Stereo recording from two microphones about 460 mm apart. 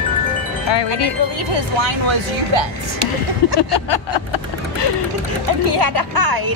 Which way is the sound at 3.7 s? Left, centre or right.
Left.